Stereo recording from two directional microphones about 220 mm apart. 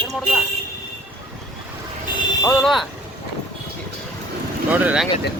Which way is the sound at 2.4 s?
Centre (ahead or behind).